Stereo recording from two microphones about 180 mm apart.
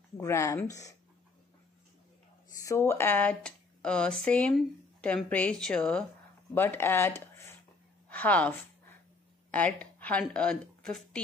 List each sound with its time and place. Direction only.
0.2 s speech: 15° left (ahead or behind)
2.6 s a woman's voice: 15° left (ahead or behind)